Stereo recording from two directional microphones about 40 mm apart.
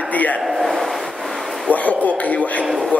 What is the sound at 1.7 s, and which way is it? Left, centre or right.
Speech, left.